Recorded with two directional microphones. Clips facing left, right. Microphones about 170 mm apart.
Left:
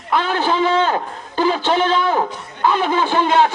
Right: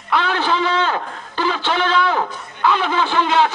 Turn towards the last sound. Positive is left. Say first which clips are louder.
# left 2 dB
turn(degrees=45)  # may be behind; listen again after turning